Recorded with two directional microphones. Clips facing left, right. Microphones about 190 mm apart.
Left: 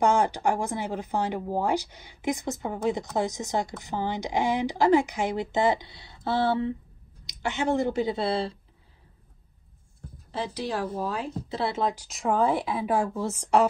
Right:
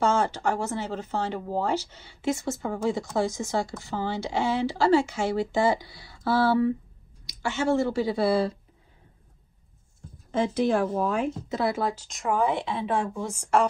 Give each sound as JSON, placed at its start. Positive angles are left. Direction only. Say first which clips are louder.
{"t": 0.0, "sound": "a woman's voice", "louder": "left 1 dB", "side_deg": 15}
{"t": 10.3, "sound": "a woman's voice", "louder": "right 7 dB", "side_deg": 35}
{"t": 12.1, "sound": "speech", "louder": "left 1 dB", "side_deg": 0}
{"t": 12.4, "sound": "a woman's voice", "louder": "left 1 dB", "side_deg": -20}
{"t": 13.3, "sound": "a woman's voice", "louder": "left 1 dB", "side_deg": -10}